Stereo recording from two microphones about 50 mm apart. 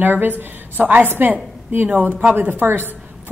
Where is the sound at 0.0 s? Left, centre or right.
Right.